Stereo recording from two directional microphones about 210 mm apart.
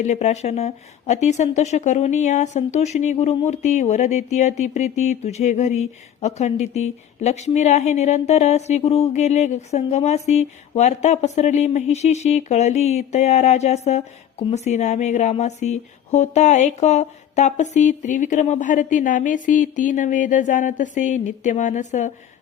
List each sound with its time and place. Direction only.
0.0 s a woman's voice: 35° left (ahead or behind)